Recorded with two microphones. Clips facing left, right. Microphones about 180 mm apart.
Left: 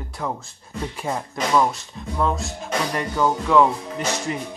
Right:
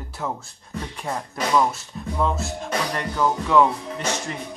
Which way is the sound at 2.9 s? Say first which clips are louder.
Left 2 dB; 5° left (ahead or behind).